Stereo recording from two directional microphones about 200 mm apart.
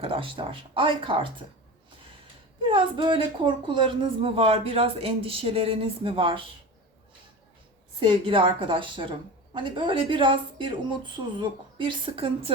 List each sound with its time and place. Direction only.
0.0 s a woman's voice: 25° right (ahead or behind)
2.6 s a woman's voice: 25° right (ahead or behind)
7.9 s a woman's voice: 25° right (ahead or behind)